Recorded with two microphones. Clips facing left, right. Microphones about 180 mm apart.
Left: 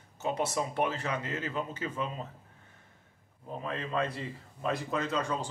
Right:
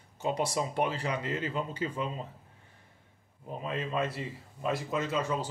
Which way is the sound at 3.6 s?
15° right (ahead or behind).